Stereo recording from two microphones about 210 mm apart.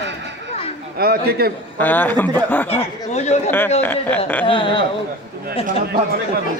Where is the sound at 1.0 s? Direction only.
45° right (ahead or behind).